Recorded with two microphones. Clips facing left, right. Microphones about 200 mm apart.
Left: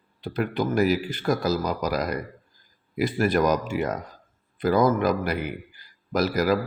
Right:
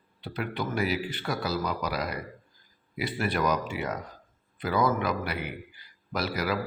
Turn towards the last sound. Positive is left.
turn(degrees=45)  # may be behind; listen again after turning